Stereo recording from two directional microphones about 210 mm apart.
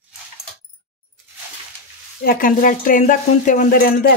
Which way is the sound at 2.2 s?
40° left (ahead or behind).